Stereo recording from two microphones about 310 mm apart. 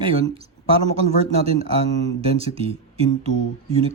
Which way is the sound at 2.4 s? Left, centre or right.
Centre.